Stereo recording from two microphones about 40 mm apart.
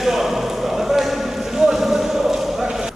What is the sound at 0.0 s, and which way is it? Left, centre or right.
Basketball bounce, centre.